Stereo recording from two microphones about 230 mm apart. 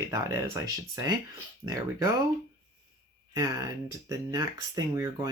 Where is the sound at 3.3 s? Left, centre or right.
Centre.